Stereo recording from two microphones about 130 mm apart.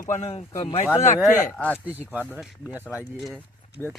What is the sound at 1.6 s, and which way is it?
Speech, 10° left (ahead or behind).